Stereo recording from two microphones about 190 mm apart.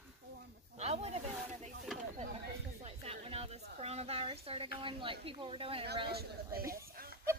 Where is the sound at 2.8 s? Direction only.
30° right (ahead or behind).